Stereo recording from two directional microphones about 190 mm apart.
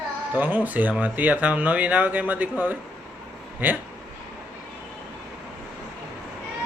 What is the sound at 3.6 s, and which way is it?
Speech, 10° right (ahead or behind).